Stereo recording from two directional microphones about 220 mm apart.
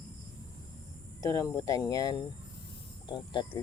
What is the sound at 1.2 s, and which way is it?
Speech, 15° left (ahead or behind).